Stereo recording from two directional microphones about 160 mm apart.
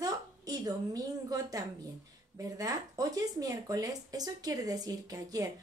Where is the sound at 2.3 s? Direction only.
20° right (ahead or behind).